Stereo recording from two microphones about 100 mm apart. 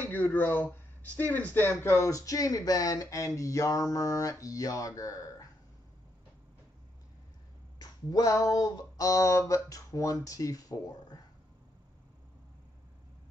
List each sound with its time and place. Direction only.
0.0 s speech: 20° left (ahead or behind); by 5.5 s 35° left (ahead or behind)
7.8 s speech: 40° left (ahead or behind)